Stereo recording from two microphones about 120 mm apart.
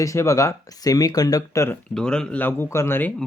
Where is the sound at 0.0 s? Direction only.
25° left (ahead or behind).